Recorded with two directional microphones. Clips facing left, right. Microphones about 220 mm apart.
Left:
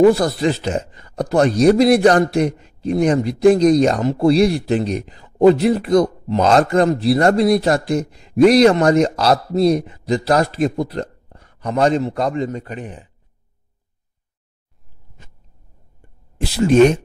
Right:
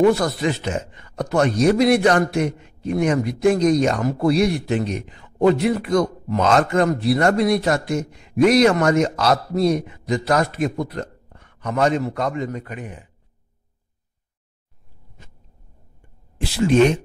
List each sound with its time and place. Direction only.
0.1 s a man's voice: 35° left (ahead or behind)
16.3 s speech: 40° left (ahead or behind)